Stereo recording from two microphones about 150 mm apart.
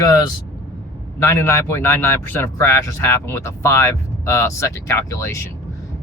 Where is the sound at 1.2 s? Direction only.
15° left (ahead or behind).